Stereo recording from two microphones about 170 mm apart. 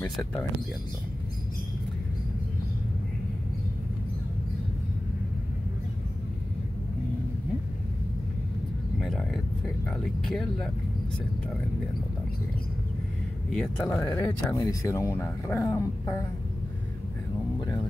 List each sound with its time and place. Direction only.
0.1 s speech: 5° left (ahead or behind)
9.0 s a sound: centre (ahead or behind)
9.8 s vehicle: centre (ahead or behind)
13.5 s speech: 5° left (ahead or behind)